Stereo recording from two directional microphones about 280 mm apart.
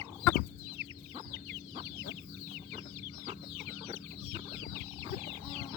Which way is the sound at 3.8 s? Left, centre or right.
Centre.